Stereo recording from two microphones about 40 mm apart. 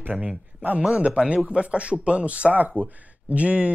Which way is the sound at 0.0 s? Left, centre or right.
Right.